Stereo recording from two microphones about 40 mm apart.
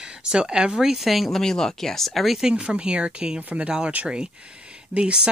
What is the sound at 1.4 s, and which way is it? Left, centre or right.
Speech, centre.